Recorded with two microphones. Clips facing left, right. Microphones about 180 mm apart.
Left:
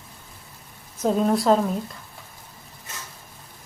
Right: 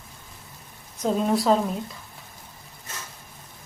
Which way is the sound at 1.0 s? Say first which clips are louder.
Left 2 dB; centre (ahead or behind).